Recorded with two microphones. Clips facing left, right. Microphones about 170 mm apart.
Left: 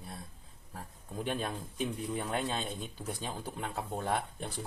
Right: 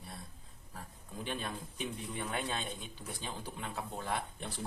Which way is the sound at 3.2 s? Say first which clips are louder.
Left 1 dB; 50° left (ahead or behind).